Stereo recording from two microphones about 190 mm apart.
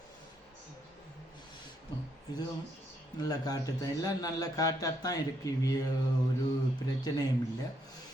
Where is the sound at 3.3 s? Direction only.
20° left (ahead or behind).